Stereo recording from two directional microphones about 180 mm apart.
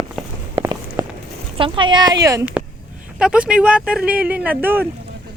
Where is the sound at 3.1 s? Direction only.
5° right (ahead or behind).